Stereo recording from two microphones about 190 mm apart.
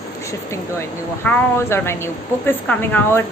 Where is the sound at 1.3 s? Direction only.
15° left (ahead or behind).